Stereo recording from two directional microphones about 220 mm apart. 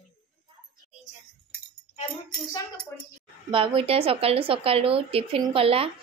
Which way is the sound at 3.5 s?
25° right (ahead or behind).